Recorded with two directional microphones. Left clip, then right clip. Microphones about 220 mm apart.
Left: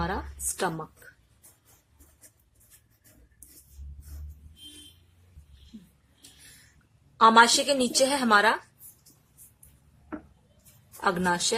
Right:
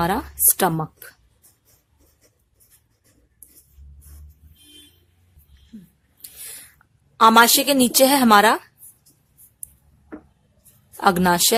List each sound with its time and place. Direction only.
0.0 s a sound: 45° right (ahead or behind)
7.2 s a woman's voice: 45° right (ahead or behind)
10.9 s a woman's voice: 45° right (ahead or behind)